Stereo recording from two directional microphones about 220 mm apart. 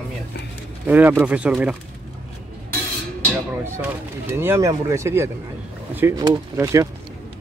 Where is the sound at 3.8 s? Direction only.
10° right (ahead or behind).